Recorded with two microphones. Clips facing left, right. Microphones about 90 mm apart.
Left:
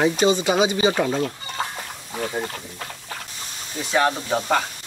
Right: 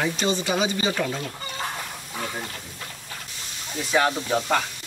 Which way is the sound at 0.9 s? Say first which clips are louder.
Left 5 dB; 30° left (ahead or behind).